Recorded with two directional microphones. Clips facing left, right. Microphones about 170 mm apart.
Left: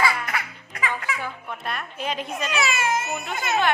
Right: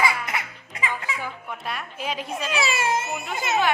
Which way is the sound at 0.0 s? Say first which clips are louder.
Left 1 dB; 20° right (ahead or behind).